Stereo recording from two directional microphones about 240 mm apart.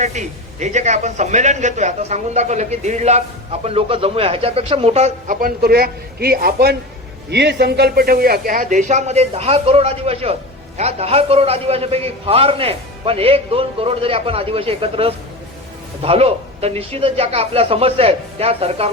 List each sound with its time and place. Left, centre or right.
0.0 s a man's voice: right